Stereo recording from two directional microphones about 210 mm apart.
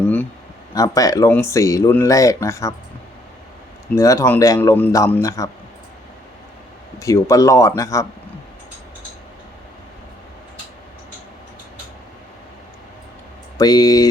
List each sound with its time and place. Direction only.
0.7 s speech: 15° left (ahead or behind)
3.9 s speech: 15° left (ahead or behind)
7.0 s speech: 15° left (ahead or behind)
13.6 s speech: 15° left (ahead or behind)